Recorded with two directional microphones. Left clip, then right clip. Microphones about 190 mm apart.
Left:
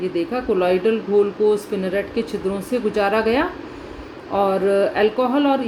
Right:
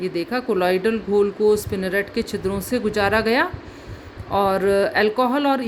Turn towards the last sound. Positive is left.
turn(degrees=-50)  # may be behind; listen again after turning